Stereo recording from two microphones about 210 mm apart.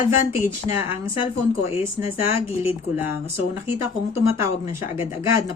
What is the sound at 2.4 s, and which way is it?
Speech, 30° left (ahead or behind).